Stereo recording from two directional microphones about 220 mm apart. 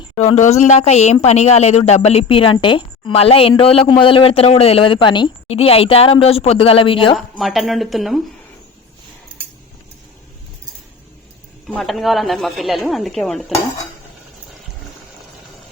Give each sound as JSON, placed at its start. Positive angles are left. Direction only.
{"t": 0.2, "sound": "speech", "side_deg": 35}
{"t": 7.2, "sound": "speech", "side_deg": 0}
{"t": 11.7, "sound": "speech", "side_deg": 0}